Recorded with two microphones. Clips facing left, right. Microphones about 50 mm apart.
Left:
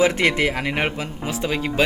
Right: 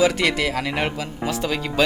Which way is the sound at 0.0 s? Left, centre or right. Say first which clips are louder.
Left 1 dB; left.